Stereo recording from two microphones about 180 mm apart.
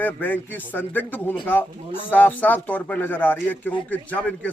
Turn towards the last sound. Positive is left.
turn(degrees=10)  # may be behind; listen again after turning